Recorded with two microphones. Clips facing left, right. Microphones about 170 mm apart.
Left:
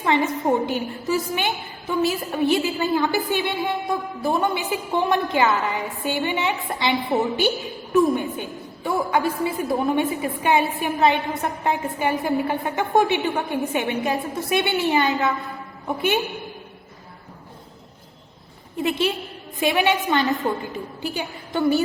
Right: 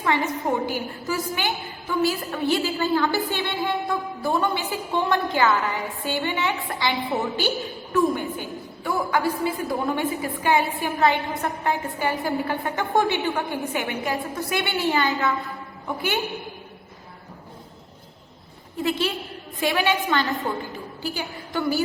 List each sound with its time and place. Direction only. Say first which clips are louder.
0.0 s a woman's voice: left 3 dB; 20° left (ahead or behind)
18.8 s a woman's voice: left 2 dB; 20° left (ahead or behind)